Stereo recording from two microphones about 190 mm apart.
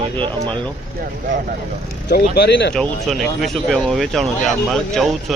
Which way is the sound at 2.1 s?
55° left (ahead or behind).